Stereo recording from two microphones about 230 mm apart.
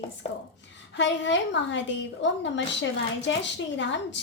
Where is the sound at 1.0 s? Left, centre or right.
Left.